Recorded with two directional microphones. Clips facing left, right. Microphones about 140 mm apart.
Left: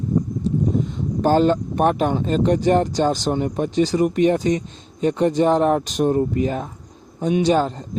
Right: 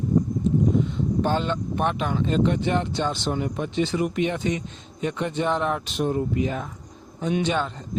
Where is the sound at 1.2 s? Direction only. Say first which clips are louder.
Left 8 dB; 40° left (ahead or behind).